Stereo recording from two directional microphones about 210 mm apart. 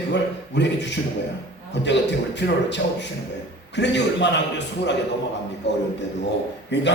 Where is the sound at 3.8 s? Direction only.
55° left (ahead or behind).